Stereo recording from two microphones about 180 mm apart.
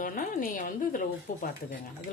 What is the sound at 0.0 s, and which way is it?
A woman's voice, 50° left (ahead or behind).